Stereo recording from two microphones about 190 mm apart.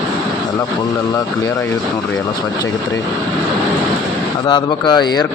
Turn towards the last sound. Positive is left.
turn(degrees=20)  # may be behind; listen again after turning